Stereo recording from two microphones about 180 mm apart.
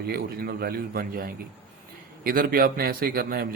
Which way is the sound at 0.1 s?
60° right (ahead or behind).